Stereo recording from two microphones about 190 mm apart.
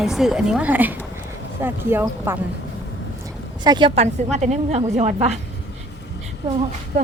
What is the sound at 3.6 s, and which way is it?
A woman's voice, 25° right (ahead or behind).